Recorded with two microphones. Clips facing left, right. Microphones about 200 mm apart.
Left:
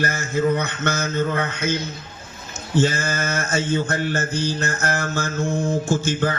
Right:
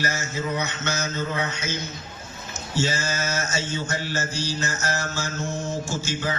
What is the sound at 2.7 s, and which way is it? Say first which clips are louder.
Mantra: left 6 dB; 55° left (ahead or behind).